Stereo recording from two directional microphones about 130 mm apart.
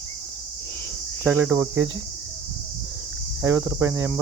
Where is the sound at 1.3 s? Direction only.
10° right (ahead or behind).